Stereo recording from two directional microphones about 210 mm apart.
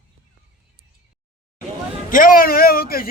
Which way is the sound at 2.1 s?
40° left (ahead or behind).